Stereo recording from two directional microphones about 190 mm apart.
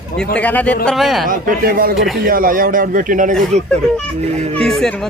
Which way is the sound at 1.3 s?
50° right (ahead or behind).